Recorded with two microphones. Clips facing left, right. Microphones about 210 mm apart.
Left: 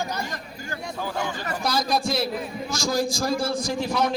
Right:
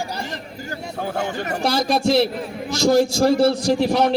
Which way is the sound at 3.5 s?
65° right (ahead or behind).